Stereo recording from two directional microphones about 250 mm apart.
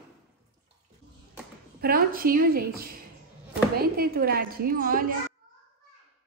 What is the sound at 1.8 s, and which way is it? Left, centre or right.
A woman's voice, right.